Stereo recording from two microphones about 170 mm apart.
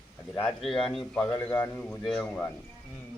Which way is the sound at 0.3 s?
5° left (ahead or behind).